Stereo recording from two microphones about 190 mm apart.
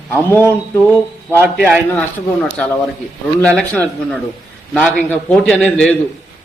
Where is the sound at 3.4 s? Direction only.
5° left (ahead or behind).